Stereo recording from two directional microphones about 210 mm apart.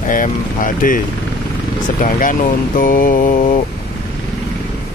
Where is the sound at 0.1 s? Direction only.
40° left (ahead or behind).